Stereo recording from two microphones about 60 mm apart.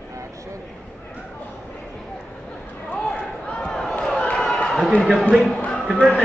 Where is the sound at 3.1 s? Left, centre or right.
Centre.